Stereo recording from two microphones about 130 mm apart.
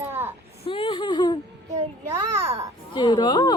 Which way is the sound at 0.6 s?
40° left (ahead or behind).